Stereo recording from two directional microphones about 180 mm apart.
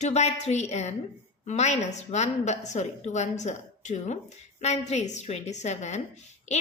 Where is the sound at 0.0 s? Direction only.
40° left (ahead or behind).